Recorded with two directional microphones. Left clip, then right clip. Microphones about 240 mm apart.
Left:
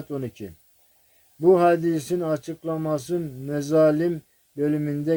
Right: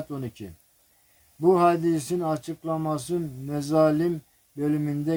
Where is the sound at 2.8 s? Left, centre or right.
Right.